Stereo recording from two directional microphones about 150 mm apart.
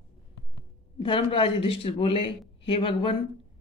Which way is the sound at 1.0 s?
35° left (ahead or behind).